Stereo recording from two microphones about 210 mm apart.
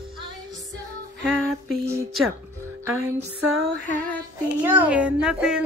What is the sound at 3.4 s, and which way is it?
Music, 85° right.